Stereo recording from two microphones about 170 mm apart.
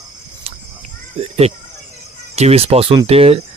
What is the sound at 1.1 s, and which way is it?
Speech, 35° right (ahead or behind).